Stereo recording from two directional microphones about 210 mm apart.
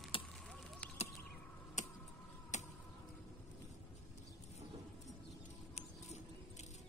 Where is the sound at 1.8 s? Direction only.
35° left (ahead or behind).